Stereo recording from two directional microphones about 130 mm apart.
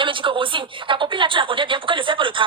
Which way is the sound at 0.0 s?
40° right (ahead or behind).